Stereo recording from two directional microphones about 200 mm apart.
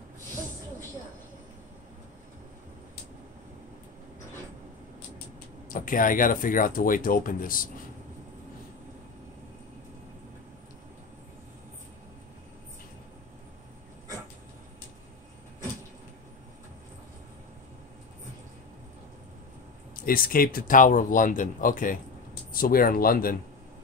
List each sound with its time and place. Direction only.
5.7 s speech: 45° left (ahead or behind)
20.1 s speech: 45° left (ahead or behind)